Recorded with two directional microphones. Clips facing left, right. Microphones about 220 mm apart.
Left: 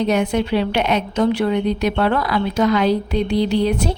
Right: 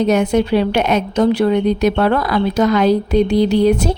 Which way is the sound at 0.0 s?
45° right (ahead or behind).